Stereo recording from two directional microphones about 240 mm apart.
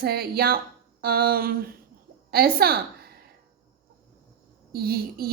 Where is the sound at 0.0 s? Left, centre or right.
Right.